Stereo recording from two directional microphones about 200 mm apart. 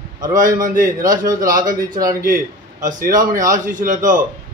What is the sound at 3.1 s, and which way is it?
Speech, 40° right (ahead or behind).